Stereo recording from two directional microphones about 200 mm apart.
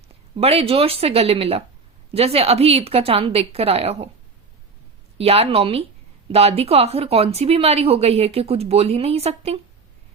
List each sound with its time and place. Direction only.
0.3 s a woman's voice: 30° right (ahead or behind)
5.1 s a woman's voice: 30° right (ahead or behind)